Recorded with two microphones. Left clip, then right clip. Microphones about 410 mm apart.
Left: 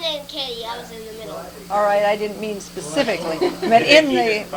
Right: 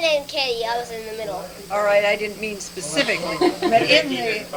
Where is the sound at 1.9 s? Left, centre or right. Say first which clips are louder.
Right 2 dB; left.